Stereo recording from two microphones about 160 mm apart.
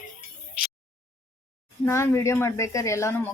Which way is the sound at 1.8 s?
15° left (ahead or behind).